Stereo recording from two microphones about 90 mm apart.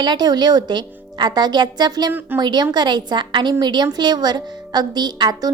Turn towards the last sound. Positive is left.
turn(degrees=-55)  # may be behind; listen again after turning